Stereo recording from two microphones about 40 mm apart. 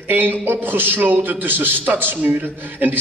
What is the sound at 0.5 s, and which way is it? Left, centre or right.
A man's voice, right.